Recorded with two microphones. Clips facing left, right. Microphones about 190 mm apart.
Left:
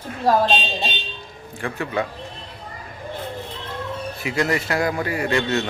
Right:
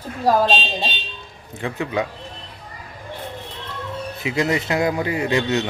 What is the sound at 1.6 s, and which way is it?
Speech, 20° right (ahead or behind).